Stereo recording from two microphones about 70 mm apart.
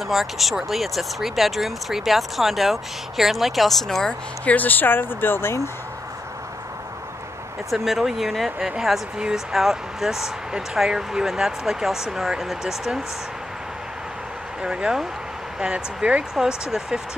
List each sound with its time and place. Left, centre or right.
0.0 s speech: centre
4.5 s speech: left
7.7 s speech: centre
14.6 s speech: centre